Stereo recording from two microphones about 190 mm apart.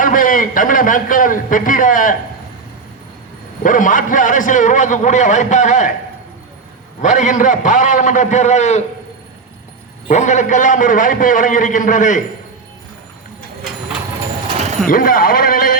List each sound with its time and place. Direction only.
0.0 s a man's voice: 45° left (ahead or behind)
3.6 s a man's voice: 45° left (ahead or behind)
7.0 s a man's voice: 40° left (ahead or behind)
10.1 s a man's voice: 40° left (ahead or behind)
14.8 s a man's voice: 50° left (ahead or behind)